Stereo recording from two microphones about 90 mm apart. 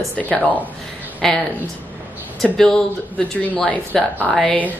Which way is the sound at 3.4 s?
15° left (ahead or behind).